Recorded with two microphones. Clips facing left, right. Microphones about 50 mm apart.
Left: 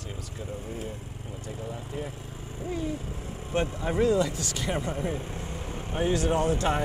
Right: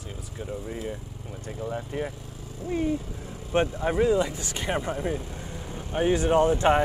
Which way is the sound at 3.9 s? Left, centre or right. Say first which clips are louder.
Even; centre.